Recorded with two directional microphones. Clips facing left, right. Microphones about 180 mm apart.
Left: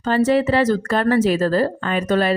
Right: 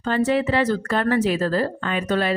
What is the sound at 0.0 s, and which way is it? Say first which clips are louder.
A woman's voice: left 4 dB; 40° left (ahead or behind).